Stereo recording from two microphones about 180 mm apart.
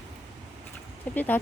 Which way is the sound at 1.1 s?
10° left (ahead or behind).